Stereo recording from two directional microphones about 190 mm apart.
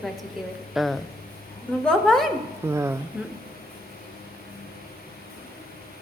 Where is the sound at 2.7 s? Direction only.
15° right (ahead or behind).